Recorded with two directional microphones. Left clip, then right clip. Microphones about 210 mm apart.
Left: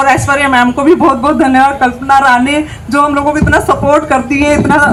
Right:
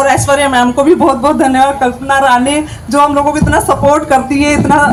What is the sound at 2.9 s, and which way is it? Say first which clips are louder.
Speech: right 1 dB; 40° right (ahead or behind).